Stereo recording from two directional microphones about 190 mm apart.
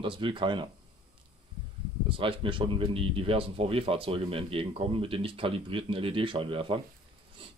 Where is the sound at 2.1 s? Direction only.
25° right (ahead or behind).